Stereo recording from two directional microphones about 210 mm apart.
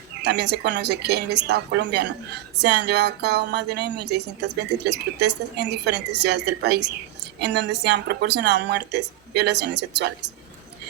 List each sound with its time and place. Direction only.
0.2 s a woman's voice: 55° right (ahead or behind)